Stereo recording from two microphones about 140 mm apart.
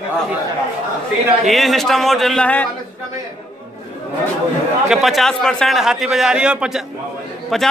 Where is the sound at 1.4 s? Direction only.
Centre (ahead or behind).